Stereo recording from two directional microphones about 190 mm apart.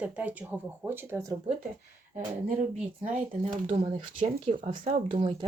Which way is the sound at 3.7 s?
30° right (ahead or behind).